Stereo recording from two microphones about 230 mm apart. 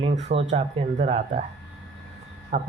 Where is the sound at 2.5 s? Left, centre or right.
Right.